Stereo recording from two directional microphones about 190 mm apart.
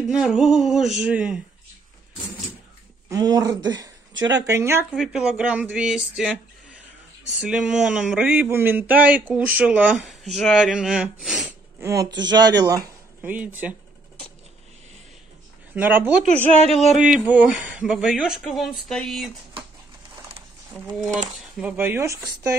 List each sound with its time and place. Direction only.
0.0 s speech: centre (ahead or behind)
3.1 s speech: 20° right (ahead or behind)
4.9 s speech: centre (ahead or behind)
11.8 s speech: 15° right (ahead or behind)
15.7 s speech: 10° right (ahead or behind)
21.5 s speech: 10° right (ahead or behind)